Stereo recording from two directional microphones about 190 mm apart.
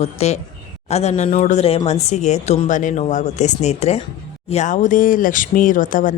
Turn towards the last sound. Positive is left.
turn(degrees=45)  # may be behind; listen again after turning